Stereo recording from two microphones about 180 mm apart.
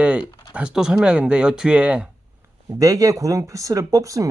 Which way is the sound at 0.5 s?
5° right (ahead or behind).